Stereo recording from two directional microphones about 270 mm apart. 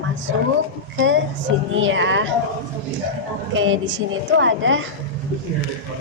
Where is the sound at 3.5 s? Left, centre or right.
Right.